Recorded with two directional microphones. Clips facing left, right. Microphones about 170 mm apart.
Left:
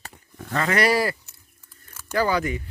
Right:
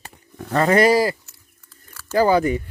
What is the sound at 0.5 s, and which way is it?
Speech, 40° right (ahead or behind).